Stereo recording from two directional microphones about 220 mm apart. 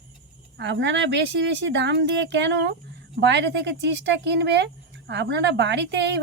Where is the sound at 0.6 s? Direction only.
55° right (ahead or behind).